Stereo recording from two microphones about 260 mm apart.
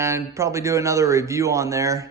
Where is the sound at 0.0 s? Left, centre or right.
Centre.